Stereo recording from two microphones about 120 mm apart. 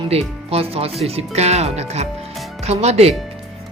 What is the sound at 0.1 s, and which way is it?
Speech, 55° right (ahead or behind).